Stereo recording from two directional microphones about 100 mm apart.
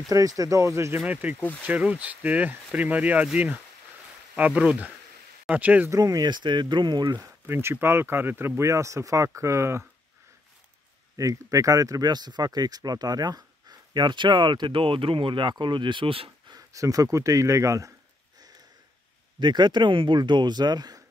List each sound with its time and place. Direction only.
0.1 s speech: 35° right (ahead or behind)
1.0 s speech: 15° right (ahead or behind)
5.9 s speech: 35° right (ahead or behind)
7.2 s speech: 25° right (ahead or behind)
11.1 s speech: 35° right (ahead or behind); by 16.3 s 60° right (ahead or behind)
16.4 s speech: 35° right (ahead or behind)
19.4 s speech: 50° right (ahead or behind)